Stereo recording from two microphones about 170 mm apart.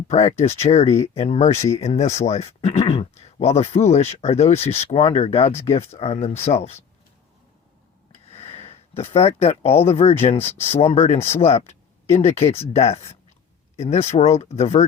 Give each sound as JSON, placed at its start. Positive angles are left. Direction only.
{"t": 0.1, "sound": "speech", "side_deg": 40}
{"t": 8.1, "sound": "speech", "side_deg": 35}